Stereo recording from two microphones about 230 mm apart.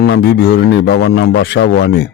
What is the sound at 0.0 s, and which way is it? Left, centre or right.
A man's voice, left.